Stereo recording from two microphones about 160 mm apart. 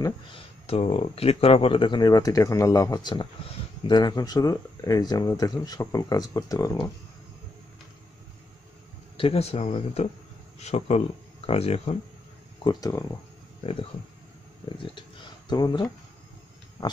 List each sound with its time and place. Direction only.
0.7 s speech: 35° left (ahead or behind)
9.1 s speech: 35° left (ahead or behind)
12.6 s speech: 25° left (ahead or behind)
15.5 s speech: 25° left (ahead or behind)